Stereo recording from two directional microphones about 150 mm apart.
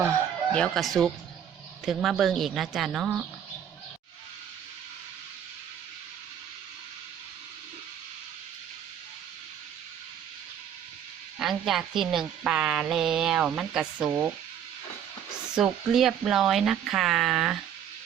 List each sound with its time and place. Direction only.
0.5 s speech: 5° left (ahead or behind)
11.3 s speech: centre (ahead or behind)
14.1 s speech: 20° right (ahead or behind)
15.5 s speech: 5° right (ahead or behind)